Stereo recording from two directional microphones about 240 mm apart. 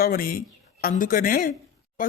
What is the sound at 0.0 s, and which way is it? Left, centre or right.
Speech, left.